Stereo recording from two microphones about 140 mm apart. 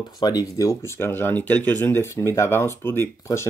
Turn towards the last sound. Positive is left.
turn(degrees=20)  # may be behind; listen again after turning